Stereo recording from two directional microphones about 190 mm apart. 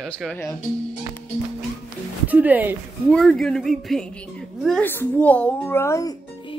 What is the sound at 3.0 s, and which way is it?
A woman's voice, 5° left (ahead or behind).